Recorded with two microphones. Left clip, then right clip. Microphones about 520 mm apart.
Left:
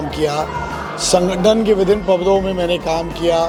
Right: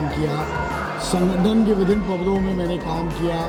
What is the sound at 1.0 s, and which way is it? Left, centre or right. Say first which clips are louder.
Speech: left 10 dB; left.